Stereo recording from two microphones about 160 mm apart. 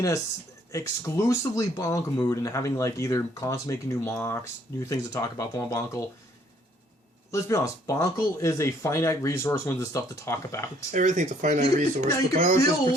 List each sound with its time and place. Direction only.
0.7 s speech: 20° left (ahead or behind)
7.3 s speech: 20° left (ahead or behind)
10.9 s speech: 50° right (ahead or behind)
12.5 s speech: 20° left (ahead or behind)